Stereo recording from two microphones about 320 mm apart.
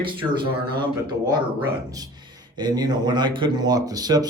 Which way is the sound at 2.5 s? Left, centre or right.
Centre.